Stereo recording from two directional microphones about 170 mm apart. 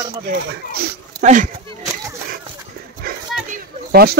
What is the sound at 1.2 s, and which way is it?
Speech, 45° right (ahead or behind).